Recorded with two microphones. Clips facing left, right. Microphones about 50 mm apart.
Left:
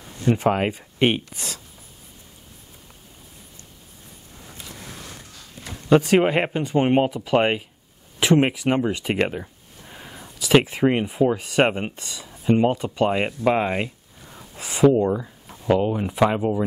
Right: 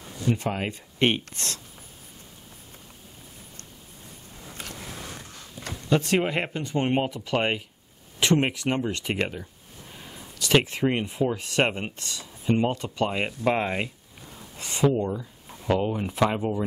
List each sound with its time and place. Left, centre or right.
0.3 s speech: left
0.7 s speech: centre
5.9 s speech: centre
6.2 s speech: left
6.6 s speech: centre
9.2 s speech: left
9.8 s a sound: centre
11.3 s speech: centre
13.5 s a sound: centre
15.0 s speech: left
15.7 s speech: centre